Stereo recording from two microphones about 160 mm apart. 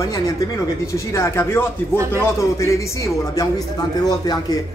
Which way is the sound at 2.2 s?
20° left (ahead or behind).